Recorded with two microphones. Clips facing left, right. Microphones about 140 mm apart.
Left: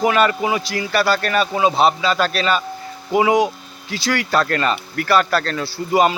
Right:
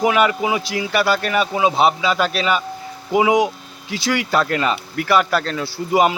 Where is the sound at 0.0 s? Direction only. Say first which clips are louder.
Even; 10° right (ahead or behind).